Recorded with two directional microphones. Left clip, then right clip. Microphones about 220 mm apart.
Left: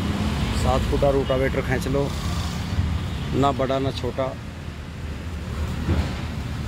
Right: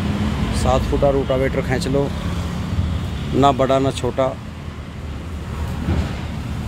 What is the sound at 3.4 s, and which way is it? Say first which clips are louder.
Speech: right 7 dB; 10° right (ahead or behind).